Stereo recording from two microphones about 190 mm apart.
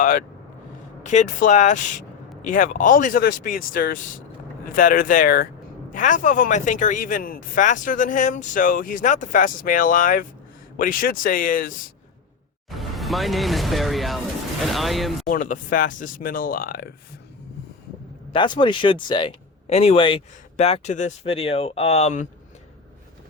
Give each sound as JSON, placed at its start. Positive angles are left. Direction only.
{"t": 1.0, "sound": "speech", "side_deg": 40}
{"t": 12.7, "sound": "speech", "side_deg": 0}
{"t": 15.3, "sound": "speech", "side_deg": 45}
{"t": 18.3, "sound": "speech", "side_deg": 25}